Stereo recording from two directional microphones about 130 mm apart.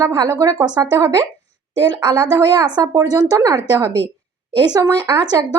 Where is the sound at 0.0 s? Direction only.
25° right (ahead or behind).